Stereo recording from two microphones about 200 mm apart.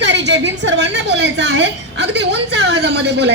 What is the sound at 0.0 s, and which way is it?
A woman's voice, 60° right (ahead or behind).